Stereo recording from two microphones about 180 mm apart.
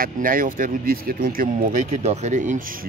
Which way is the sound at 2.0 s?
40° right (ahead or behind).